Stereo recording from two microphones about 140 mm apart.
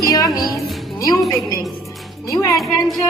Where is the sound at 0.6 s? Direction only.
Centre (ahead or behind).